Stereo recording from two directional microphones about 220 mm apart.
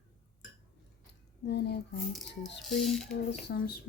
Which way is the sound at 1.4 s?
45° left (ahead or behind).